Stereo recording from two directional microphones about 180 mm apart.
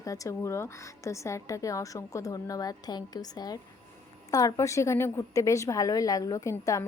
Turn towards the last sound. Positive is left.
turn(degrees=15)  # may be behind; listen again after turning